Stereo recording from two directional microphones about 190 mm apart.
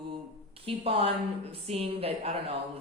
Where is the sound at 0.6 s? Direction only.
30° right (ahead or behind).